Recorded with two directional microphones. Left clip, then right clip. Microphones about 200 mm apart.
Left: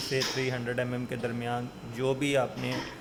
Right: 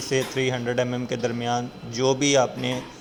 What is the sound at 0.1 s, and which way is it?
A man's voice, 15° right (ahead or behind).